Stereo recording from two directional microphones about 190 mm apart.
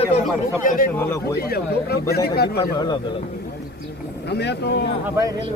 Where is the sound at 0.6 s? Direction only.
45° left (ahead or behind).